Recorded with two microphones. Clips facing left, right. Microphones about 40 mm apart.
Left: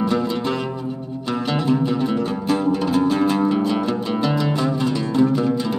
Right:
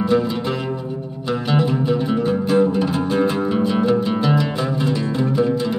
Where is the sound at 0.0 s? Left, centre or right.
Centre.